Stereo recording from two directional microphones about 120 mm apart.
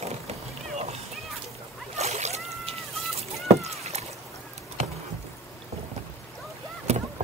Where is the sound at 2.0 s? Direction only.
65° right (ahead or behind).